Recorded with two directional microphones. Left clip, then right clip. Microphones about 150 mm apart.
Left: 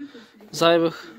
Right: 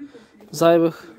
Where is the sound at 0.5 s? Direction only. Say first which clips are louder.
Right 2 dB; 70° right (ahead or behind).